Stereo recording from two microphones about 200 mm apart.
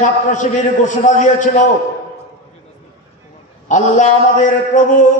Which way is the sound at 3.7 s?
40° left (ahead or behind).